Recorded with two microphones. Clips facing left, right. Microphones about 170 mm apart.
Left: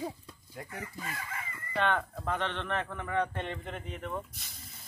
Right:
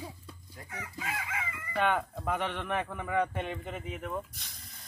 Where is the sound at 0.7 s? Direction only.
90° right.